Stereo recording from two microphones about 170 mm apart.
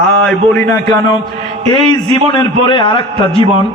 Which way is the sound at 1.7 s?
25° left (ahead or behind).